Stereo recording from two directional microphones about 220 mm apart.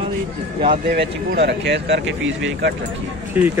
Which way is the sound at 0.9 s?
50° right (ahead or behind).